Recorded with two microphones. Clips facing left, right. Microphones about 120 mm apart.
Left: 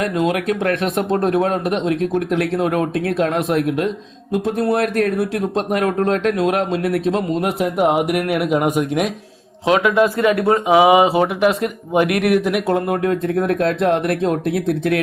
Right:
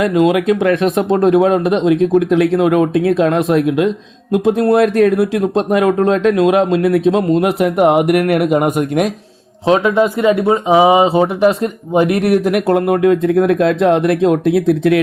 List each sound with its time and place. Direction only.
0.0 s speech: centre (ahead or behind)
9.8 s speech: 25° right (ahead or behind)
10.4 s speech: centre (ahead or behind)
10.8 s speech: 30° right (ahead or behind)
12.4 s speech: centre (ahead or behind)